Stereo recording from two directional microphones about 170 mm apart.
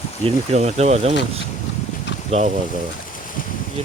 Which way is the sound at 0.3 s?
40° right (ahead or behind).